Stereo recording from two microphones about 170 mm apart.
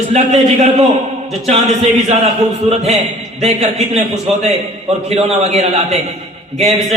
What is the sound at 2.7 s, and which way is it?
Speech, 40° right (ahead or behind).